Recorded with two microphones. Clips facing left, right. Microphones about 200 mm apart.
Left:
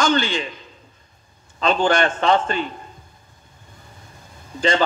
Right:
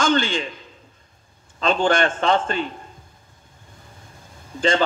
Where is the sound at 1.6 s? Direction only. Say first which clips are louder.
Left 1 dB; 50° right (ahead or behind).